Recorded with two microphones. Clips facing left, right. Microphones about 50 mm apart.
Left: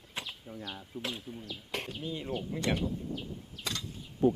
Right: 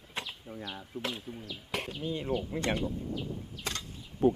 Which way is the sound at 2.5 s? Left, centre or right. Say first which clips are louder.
Right 1 dB; centre.